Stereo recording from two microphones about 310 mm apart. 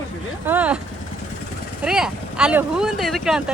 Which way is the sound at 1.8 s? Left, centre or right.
Centre.